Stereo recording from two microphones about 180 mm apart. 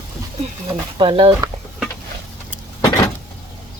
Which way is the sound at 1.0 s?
30° right (ahead or behind).